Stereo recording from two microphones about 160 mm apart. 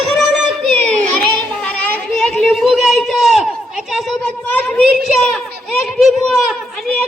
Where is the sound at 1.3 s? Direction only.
5° left (ahead or behind).